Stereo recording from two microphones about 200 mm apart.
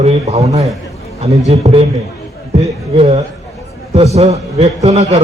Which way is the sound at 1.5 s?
30° right (ahead or behind).